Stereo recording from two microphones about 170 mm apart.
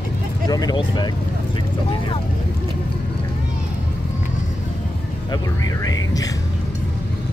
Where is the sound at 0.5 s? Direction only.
20° left (ahead or behind).